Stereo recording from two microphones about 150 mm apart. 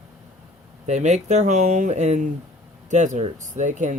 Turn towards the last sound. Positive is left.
turn(degrees=-55)  # may be behind; listen again after turning